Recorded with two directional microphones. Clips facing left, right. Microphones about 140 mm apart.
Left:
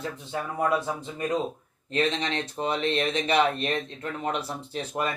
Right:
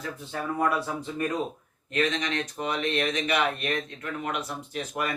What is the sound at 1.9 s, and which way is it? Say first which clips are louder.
Speech: left 1 dB; 30° left (ahead or behind).